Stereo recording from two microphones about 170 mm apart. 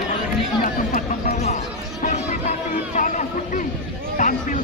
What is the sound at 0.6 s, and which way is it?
Chatter, 50° left (ahead or behind).